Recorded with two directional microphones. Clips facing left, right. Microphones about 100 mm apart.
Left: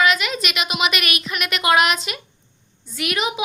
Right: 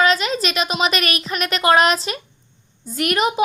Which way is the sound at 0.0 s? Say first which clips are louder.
Right 2 dB; 35° right (ahead or behind).